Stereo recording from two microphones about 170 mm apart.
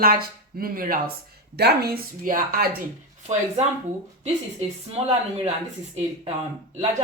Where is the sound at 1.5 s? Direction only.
70° right (ahead or behind).